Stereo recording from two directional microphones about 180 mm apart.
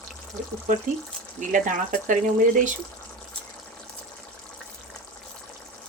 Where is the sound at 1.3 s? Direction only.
45° right (ahead or behind).